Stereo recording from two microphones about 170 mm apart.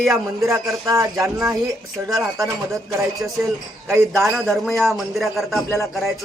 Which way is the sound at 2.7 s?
Centre (ahead or behind).